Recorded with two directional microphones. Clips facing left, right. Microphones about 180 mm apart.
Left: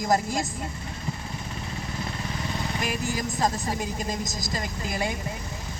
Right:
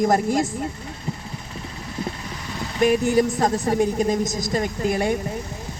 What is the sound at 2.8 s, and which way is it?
A woman's voice, 60° right (ahead or behind).